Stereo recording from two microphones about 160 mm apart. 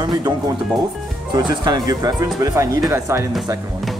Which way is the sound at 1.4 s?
25° right (ahead or behind).